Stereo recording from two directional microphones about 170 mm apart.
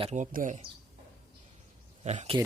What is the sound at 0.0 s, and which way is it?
Speech, 45° right (ahead or behind).